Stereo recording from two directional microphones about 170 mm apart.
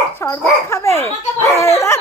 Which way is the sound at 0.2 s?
15° left (ahead or behind).